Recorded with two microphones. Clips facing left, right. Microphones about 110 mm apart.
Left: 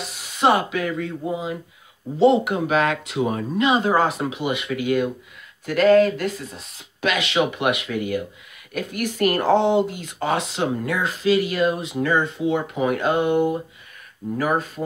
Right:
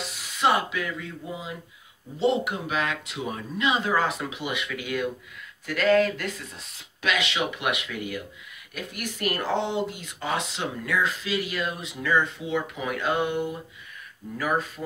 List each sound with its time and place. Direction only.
0.4 s speech: 50° left (ahead or behind)
2.1 s speech: 75° left (ahead or behind); by 6.6 s 35° left (ahead or behind)
7.0 s speech: 50° left (ahead or behind)